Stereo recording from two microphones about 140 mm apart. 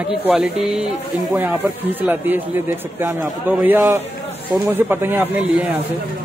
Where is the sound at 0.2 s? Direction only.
10° right (ahead or behind).